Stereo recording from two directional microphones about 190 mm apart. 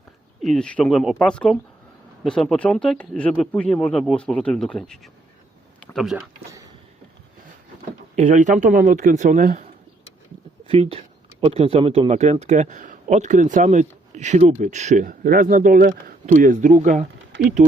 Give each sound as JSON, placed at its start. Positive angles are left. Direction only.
{"t": 0.4, "sound": "speech", "side_deg": 5}
{"t": 5.8, "sound": "a sound", "side_deg": 0}
{"t": 8.1, "sound": "speech", "side_deg": -40}
{"t": 10.7, "sound": "speech", "side_deg": -30}